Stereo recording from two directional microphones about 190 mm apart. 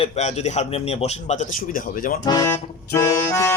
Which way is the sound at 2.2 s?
20° left (ahead or behind).